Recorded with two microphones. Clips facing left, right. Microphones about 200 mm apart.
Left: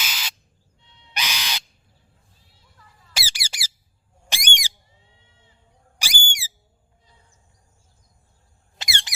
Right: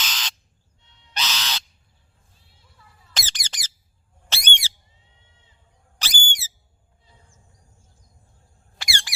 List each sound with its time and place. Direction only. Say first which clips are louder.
0.0 s squawk: right 1 dB; 10° left (ahead or behind)
1.1 s crow: right 1 dB; 10° left (ahead or behind)
3.1 s squeak: left 1 dB; 10° left (ahead or behind)
4.3 s squawk: even; 15° left (ahead or behind)
6.0 s whistle: even; 10° left (ahead or behind)
8.8 s a sound: even; 20° left (ahead or behind)